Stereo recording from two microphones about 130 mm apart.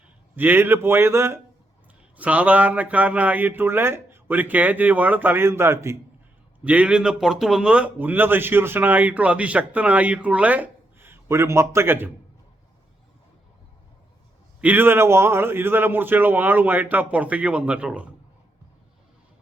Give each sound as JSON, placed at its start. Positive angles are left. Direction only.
{"t": 0.3, "sound": "speech", "side_deg": -15}
{"t": 6.7, "sound": "speech", "side_deg": -10}
{"t": 14.6, "sound": "speech", "side_deg": -15}